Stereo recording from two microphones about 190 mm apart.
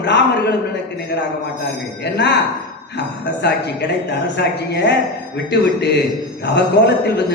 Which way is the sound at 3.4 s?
60° left (ahead or behind).